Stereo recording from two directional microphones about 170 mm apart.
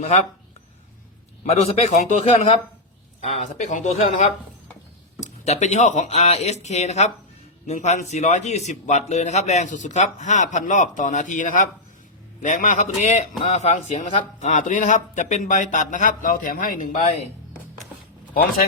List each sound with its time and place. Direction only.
1.5 s speech: 40° left (ahead or behind)